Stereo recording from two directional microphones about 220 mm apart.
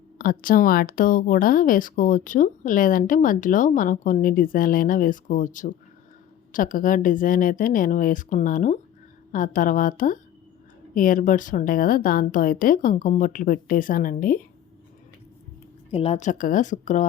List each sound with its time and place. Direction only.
0.2 s speech: 40° left (ahead or behind)
15.9 s speech: 25° left (ahead or behind)